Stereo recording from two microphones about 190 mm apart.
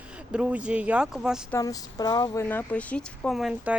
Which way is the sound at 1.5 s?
20° left (ahead or behind).